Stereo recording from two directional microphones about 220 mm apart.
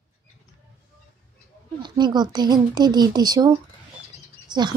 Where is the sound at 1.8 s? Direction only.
20° right (ahead or behind).